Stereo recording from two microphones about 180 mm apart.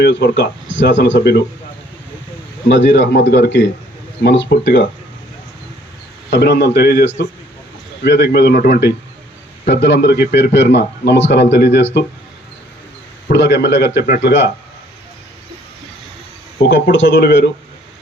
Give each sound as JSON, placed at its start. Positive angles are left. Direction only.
{"t": 0.0, "sound": "speech", "side_deg": 75}
{"t": 2.6, "sound": "speech", "side_deg": 90}
{"t": 6.3, "sound": "speech", "side_deg": 70}
{"t": 8.0, "sound": "speech", "side_deg": 70}
{"t": 9.6, "sound": "speech", "side_deg": 75}
{"t": 13.2, "sound": "speech", "side_deg": 75}
{"t": 16.6, "sound": "speech", "side_deg": 80}